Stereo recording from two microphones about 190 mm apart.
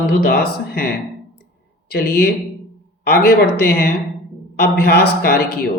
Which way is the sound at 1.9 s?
55° left (ahead or behind).